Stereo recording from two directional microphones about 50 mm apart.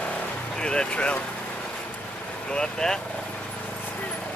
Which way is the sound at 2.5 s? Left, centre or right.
Centre.